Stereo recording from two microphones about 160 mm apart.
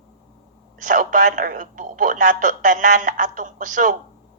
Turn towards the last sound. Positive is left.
turn(degrees=-55)  # may be behind; listen again after turning